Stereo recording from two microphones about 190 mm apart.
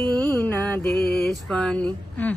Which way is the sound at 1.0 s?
55° left (ahead or behind).